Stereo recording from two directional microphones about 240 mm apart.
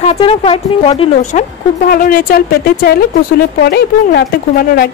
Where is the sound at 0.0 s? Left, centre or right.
Left.